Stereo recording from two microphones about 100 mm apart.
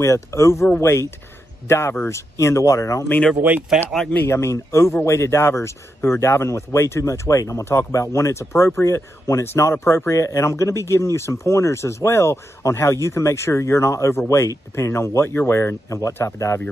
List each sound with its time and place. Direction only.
0.0 s speech: 30° left (ahead or behind)
3.4 s speech: 15° right (ahead or behind)
4.1 s speech: 25° left (ahead or behind)